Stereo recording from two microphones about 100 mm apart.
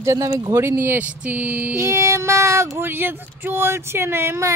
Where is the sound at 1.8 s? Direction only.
30° right (ahead or behind).